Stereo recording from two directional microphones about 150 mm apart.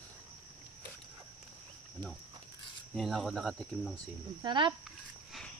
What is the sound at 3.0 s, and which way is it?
Speech, centre (ahead or behind).